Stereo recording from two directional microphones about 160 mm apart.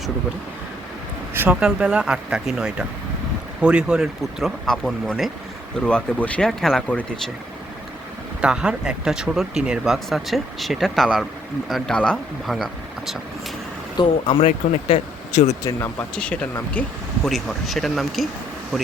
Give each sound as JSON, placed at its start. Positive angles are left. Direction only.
{"t": 1.3, "sound": "speech", "side_deg": -10}
{"t": 8.4, "sound": "speech", "side_deg": -5}
{"t": 13.9, "sound": "speech", "side_deg": 30}
{"t": 15.6, "sound": "speech", "side_deg": 15}